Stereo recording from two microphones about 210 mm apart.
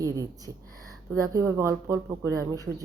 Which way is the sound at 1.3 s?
15° right (ahead or behind).